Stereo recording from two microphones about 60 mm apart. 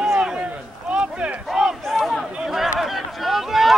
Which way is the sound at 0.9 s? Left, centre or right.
Centre.